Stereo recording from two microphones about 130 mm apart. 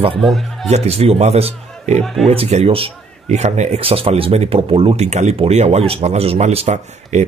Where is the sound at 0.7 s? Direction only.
50° right (ahead or behind).